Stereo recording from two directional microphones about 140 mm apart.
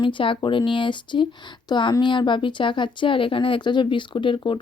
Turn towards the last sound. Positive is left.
turn(degrees=35)  # may be behind; listen again after turning